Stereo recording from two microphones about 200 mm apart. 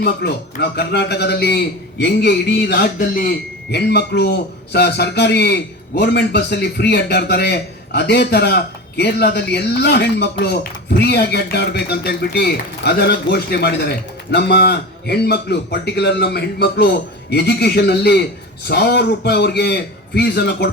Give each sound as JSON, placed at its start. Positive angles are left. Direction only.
{"t": 0.0, "sound": "a man's voice", "side_deg": 55}